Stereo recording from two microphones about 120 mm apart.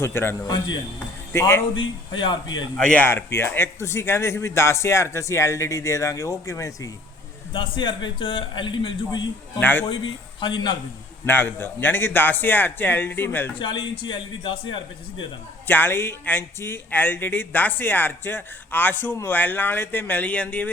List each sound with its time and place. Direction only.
0.0 s speech: 20° left (ahead or behind)
0.4 s speech: 35° left (ahead or behind)
1.3 s speech: 20° left (ahead or behind)
1.7 s speech: 40° left (ahead or behind)
2.7 s speech: 10° left (ahead or behind); by 6.9 s 25° left (ahead or behind)
7.5 s a man's voice: 45° left (ahead or behind)
9.6 s speech: 15° left (ahead or behind)
10.4 s speech: 40° left (ahead or behind)
11.3 s speech: 15° left (ahead or behind)
13.6 s a man's voice: 40° left (ahead or behind)
15.6 s speech: 15° left (ahead or behind)